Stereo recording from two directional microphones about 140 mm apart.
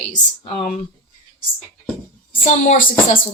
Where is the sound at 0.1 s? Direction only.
65° left (ahead or behind).